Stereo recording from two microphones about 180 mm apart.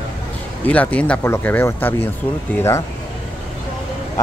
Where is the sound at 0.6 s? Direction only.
10° left (ahead or behind).